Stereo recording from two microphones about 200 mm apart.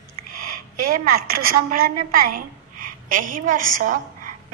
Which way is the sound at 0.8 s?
45° right (ahead or behind).